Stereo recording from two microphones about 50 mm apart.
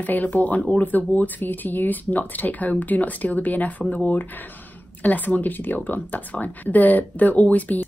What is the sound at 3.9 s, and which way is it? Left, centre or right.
Speech, left.